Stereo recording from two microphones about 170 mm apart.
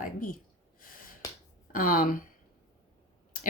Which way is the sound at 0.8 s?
55° left (ahead or behind).